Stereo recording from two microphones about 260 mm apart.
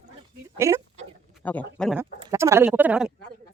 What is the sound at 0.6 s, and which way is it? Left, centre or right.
Speech, centre.